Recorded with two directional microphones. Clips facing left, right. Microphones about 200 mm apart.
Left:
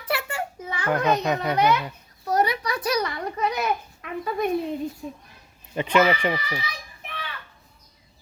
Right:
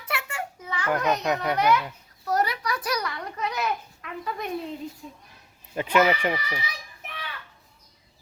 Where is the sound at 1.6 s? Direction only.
20° left (ahead or behind).